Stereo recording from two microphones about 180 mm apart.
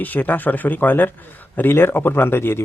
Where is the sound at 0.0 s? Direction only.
10° left (ahead or behind).